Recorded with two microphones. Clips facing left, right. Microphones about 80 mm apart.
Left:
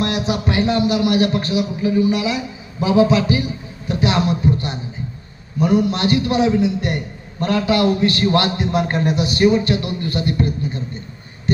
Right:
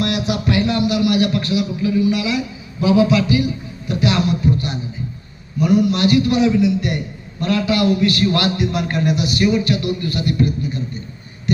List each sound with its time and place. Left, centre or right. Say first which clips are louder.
0.0 s a sound: even; left
2.8 s music: even; left
5.5 s a man's voice: right 1 dB; left